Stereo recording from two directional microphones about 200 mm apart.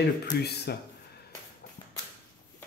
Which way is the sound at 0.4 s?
55° left (ahead or behind).